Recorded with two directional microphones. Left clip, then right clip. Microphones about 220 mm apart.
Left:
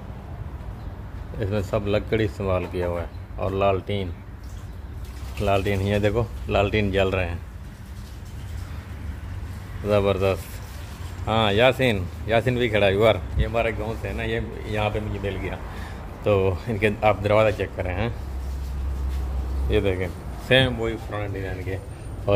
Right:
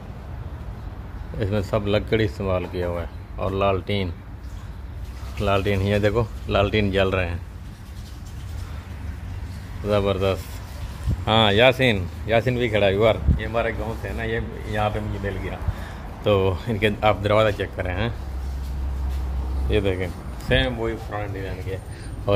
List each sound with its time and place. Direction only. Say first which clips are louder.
1.4 s speech: right 1 dB; 5° right (ahead or behind)
5.4 s speech: right 1 dB; centre (ahead or behind)
9.8 s speech: left 1 dB; 5° left (ahead or behind)
11.2 s speech: right 3 dB; 10° right (ahead or behind)
19.7 s speech: even; centre (ahead or behind)
20.5 s speech: left 3 dB; 25° left (ahead or behind)
20.8 s speech: right 1 dB; 10° left (ahead or behind)